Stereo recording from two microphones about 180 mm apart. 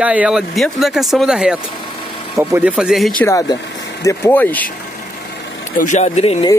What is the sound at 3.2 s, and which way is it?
Speech, 20° left (ahead or behind).